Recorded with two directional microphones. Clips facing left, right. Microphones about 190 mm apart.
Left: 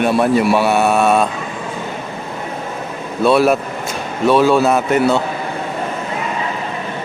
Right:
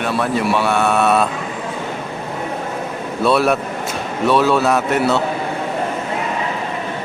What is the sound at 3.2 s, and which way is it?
Speech, centre (ahead or behind).